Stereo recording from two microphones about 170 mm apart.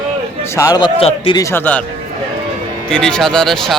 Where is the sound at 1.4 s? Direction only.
15° left (ahead or behind).